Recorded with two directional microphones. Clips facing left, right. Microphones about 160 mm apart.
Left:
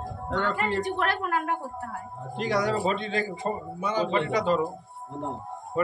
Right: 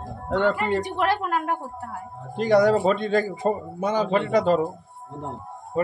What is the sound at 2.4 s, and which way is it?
A man's voice, 45° right (ahead or behind).